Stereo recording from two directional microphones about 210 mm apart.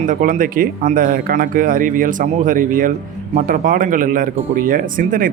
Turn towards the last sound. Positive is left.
turn(degrees=-40)  # may be behind; listen again after turning